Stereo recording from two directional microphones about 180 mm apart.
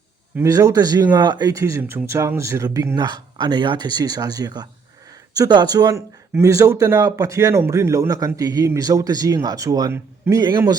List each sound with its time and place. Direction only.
0.3 s speech: 20° right (ahead or behind)